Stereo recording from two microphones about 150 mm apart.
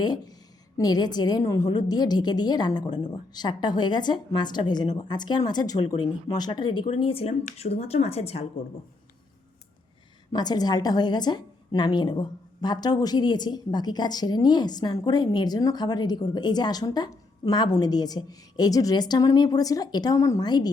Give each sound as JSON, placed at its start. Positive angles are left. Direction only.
{"t": 0.0, "sound": "a woman's voice", "side_deg": 25}
{"t": 10.3, "sound": "a woman's voice", "side_deg": 25}